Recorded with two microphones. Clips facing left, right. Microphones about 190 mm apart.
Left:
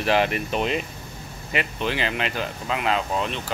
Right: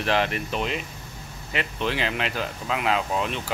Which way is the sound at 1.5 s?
5° left (ahead or behind).